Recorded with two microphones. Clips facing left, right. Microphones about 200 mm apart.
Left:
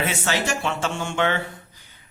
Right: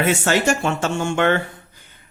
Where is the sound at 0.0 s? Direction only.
50° right (ahead or behind).